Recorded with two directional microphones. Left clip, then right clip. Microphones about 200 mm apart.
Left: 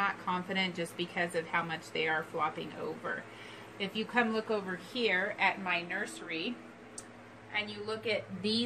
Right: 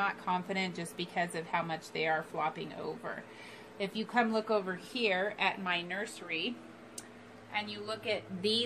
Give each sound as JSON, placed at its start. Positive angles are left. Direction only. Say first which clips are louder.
{"t": 0.0, "sound": "a woman's voice", "louder": "even", "side_deg": -30}
{"t": 3.7, "sound": "a woman's voice", "louder": "even", "side_deg": -30}
{"t": 5.0, "sound": "a woman's voice", "louder": "left 1 dB", "side_deg": -35}
{"t": 7.5, "sound": "a woman's voice", "louder": "left 1 dB", "side_deg": -20}
{"t": 8.4, "sound": "a woman's voice", "louder": "right 2 dB", "side_deg": -35}